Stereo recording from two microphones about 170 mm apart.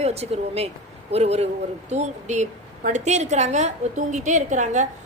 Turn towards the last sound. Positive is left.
turn(degrees=-45)  # may be behind; listen again after turning